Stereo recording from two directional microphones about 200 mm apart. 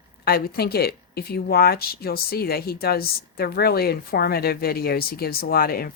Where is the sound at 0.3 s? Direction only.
50° left (ahead or behind).